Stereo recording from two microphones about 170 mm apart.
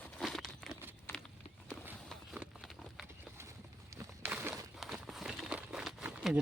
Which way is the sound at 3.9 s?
10° right (ahead or behind).